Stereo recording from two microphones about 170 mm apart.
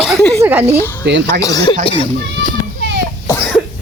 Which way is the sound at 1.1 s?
90° right.